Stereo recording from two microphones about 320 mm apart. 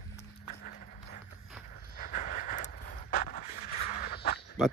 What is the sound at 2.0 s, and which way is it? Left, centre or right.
Vehicle, left.